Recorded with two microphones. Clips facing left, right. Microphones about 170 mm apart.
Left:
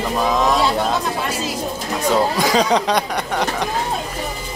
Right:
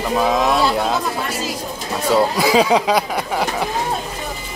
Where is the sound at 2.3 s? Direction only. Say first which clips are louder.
Right 2 dB; 5° right (ahead or behind).